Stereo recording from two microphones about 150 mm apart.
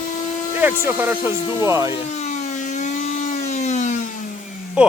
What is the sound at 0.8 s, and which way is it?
Speech, 15° right (ahead or behind).